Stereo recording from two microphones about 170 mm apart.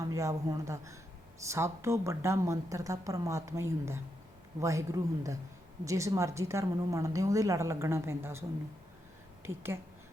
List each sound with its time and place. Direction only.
0.0 s a woman's voice: 20° right (ahead or behind)